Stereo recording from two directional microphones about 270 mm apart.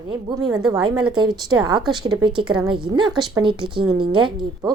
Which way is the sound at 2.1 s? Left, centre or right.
Centre.